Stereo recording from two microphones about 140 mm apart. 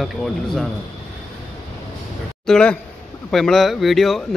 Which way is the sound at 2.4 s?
5° left (ahead or behind).